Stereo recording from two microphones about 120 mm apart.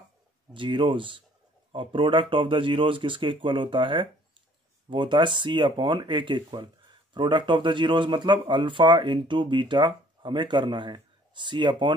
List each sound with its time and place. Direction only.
0.5 s speech: 45° right (ahead or behind)